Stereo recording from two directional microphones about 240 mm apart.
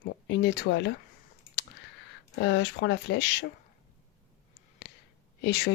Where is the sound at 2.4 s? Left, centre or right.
Left.